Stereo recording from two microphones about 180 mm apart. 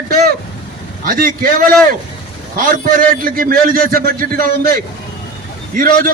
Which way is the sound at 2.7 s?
50° right (ahead or behind).